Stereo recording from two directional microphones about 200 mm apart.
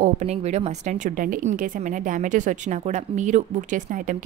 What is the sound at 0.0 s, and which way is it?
A woman's voice, 35° right (ahead or behind).